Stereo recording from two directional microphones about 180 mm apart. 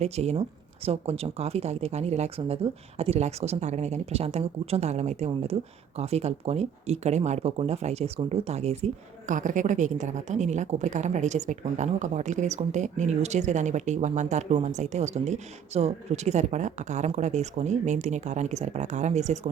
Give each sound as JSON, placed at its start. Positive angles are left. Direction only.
{"t": 0.0, "sound": "speech", "side_deg": -35}